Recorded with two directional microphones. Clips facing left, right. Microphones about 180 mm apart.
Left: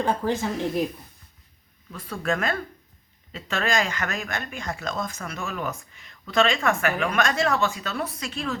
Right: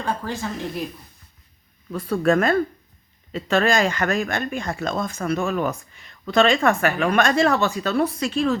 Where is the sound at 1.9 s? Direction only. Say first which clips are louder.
Right 8 dB; 40° right (ahead or behind).